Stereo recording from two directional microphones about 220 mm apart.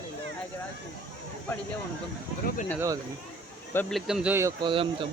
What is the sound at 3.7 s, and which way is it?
Speech, 5° left (ahead or behind).